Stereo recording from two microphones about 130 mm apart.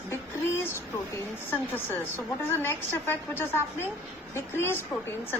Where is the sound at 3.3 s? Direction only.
20° left (ahead or behind).